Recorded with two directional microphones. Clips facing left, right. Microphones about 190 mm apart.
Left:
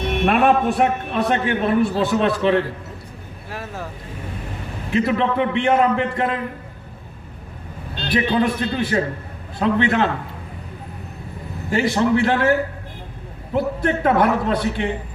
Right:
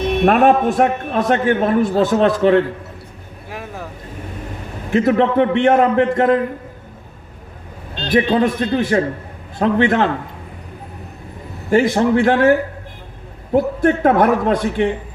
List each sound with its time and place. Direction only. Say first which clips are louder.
0.3 s a man's voice: right 3 dB; 45° right (ahead or behind)
3.5 s speech: right 1 dB; 15° right (ahead or behind)
4.9 s a man's voice: right 5 dB; 50° right (ahead or behind)
8.0 s a man's voice: right 4 dB; 45° right (ahead or behind)
11.7 s a man's voice: right 4 dB; 50° right (ahead or behind)